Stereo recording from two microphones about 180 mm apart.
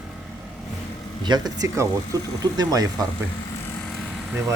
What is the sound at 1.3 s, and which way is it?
Speech, 20° right (ahead or behind).